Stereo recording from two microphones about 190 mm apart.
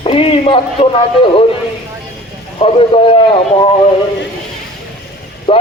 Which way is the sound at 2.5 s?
30° left (ahead or behind).